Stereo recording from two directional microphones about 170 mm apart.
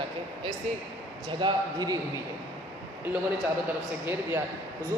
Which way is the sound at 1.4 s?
25° right (ahead or behind).